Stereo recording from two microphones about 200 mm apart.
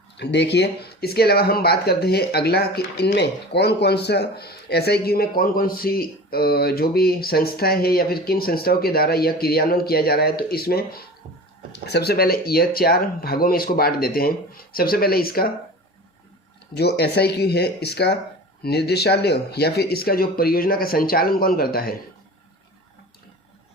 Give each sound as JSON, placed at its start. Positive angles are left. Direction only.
{"t": 0.2, "sound": "speech", "side_deg": 60}
{"t": 16.7, "sound": "speech", "side_deg": 55}